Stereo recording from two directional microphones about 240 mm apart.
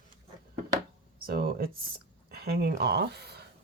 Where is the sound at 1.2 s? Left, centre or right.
Right.